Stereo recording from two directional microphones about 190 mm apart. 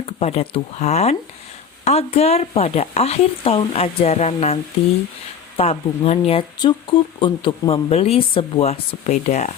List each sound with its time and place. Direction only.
0.0 s speech: 35° left (ahead or behind)